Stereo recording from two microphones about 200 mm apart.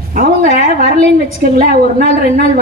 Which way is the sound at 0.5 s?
30° left (ahead or behind).